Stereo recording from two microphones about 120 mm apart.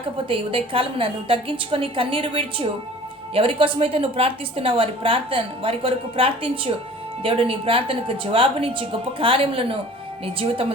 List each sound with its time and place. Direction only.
0.3 s a woman's voice: 50° right (ahead or behind)